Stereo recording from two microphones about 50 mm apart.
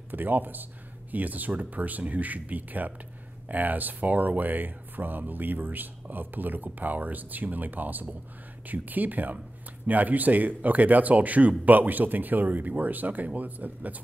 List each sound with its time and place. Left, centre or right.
0.1 s speech: right